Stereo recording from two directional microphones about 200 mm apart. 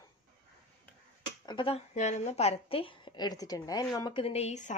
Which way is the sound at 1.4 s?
25° left (ahead or behind).